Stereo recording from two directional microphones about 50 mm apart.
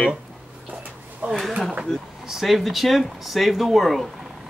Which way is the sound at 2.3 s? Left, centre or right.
Centre.